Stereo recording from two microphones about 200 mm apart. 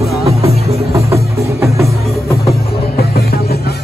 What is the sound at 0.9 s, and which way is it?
Music, 15° right (ahead or behind).